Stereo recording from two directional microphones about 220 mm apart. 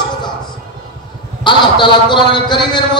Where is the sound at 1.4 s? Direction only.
20° left (ahead or behind).